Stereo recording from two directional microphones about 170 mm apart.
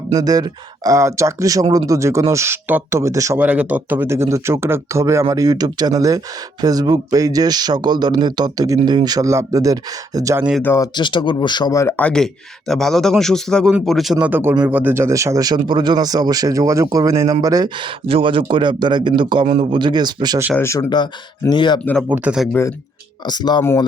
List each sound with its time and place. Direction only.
0.1 s speech: 20° right (ahead or behind)
10.6 s speech: 15° left (ahead or behind)
10.9 s speech: 30° left (ahead or behind); by 20.4 s 25° right (ahead or behind)
20.6 s speech: 20° left (ahead or behind)
22.1 s speech: 5° right (ahead or behind)
23.2 s speech: 25° left (ahead or behind)